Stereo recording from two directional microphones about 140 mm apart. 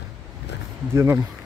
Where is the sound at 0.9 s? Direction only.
20° right (ahead or behind).